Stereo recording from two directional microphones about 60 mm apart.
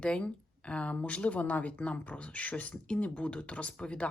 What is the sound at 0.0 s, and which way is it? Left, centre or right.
Speech, centre.